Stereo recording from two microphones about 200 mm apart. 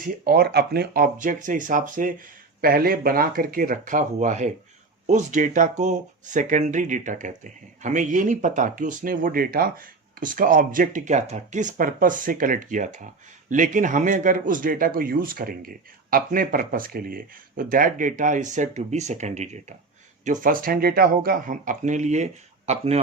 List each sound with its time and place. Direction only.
0.0 s speech: 50° right (ahead or behind); by 23.0 s 35° right (ahead or behind)